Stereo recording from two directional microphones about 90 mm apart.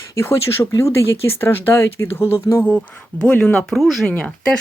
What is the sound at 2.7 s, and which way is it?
Speech, 15° left (ahead or behind).